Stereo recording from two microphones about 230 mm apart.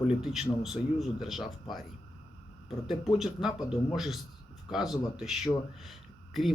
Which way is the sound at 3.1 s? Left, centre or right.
Centre.